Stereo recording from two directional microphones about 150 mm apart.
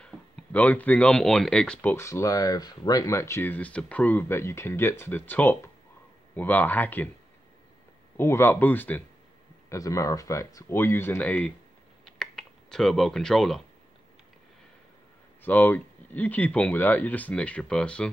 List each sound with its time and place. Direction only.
0.0 s speech: 10° left (ahead or behind)
8.2 s speech: 15° left (ahead or behind)
12.0 s a sound: 5° left (ahead or behind)
15.4 s speech: 10° left (ahead or behind)